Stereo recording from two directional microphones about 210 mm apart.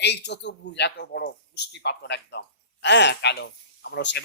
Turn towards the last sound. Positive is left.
turn(degrees=55)  # may be behind; listen again after turning